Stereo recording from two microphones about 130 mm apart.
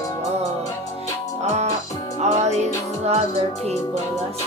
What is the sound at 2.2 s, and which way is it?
Music, 60° right (ahead or behind).